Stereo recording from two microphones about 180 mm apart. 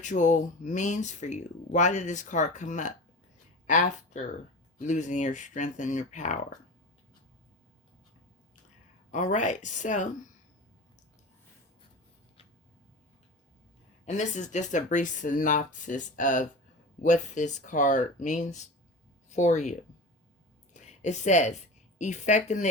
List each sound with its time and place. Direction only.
0.0 s speech: 40° left (ahead or behind)
9.1 s speech: 45° left (ahead or behind)
14.0 s speech: 40° left (ahead or behind)
20.7 s a sound: 40° left (ahead or behind)
21.9 s speech: 40° left (ahead or behind)